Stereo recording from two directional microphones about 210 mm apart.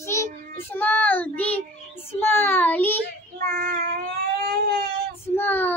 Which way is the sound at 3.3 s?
40° right (ahead or behind).